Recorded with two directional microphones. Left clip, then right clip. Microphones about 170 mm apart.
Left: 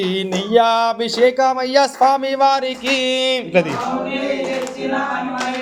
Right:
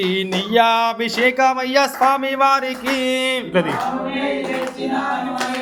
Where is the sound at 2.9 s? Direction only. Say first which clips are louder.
Left 2 dB; 30° left (ahead or behind).